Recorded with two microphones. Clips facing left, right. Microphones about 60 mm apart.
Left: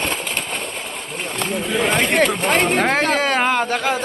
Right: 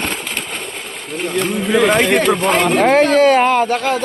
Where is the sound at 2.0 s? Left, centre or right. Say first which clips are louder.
Right 3 dB; right.